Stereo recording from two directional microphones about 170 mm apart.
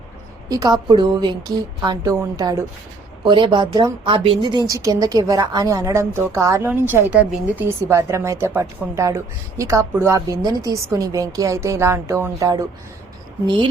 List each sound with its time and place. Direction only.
0.4 s a woman's voice: 20° right (ahead or behind)